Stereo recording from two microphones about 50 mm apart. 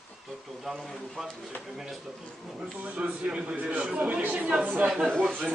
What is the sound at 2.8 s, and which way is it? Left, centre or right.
A man's voice, right.